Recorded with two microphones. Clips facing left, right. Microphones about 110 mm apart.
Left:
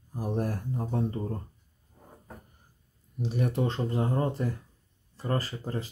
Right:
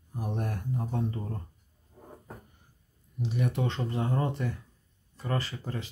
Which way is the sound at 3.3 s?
40° left (ahead or behind).